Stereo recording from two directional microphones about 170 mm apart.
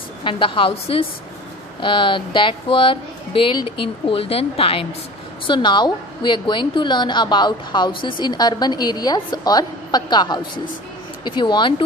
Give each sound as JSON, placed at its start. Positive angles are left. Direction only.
{"t": 0.2, "sound": "a woman's voice", "side_deg": 30}